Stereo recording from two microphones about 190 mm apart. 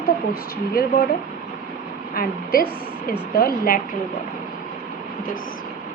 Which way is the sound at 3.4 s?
50° left (ahead or behind).